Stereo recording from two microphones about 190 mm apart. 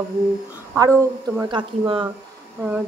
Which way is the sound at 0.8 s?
15° right (ahead or behind).